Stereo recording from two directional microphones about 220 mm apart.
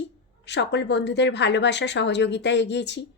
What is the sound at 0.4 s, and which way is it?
A woman's voice, 50° left (ahead or behind).